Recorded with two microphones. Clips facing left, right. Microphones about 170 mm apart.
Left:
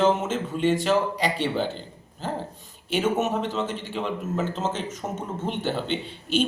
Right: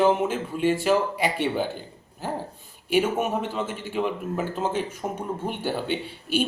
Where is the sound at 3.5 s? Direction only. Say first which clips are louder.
Left 1 dB; 10° right (ahead or behind).